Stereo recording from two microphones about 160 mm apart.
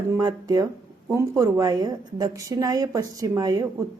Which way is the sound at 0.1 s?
25° right (ahead or behind).